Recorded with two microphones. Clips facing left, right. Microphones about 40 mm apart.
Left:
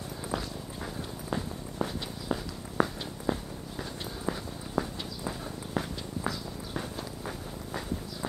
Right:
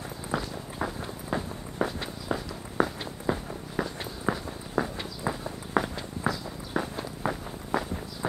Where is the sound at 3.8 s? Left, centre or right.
Right.